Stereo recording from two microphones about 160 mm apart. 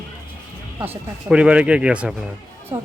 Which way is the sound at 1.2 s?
5° right (ahead or behind).